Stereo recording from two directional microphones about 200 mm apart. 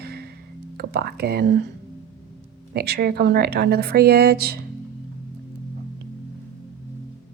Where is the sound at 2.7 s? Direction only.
50° right (ahead or behind).